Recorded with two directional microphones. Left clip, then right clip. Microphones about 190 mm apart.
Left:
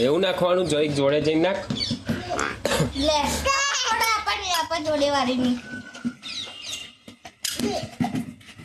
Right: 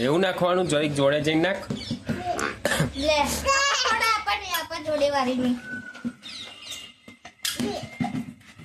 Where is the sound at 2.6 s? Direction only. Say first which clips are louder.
Even; 20° right (ahead or behind).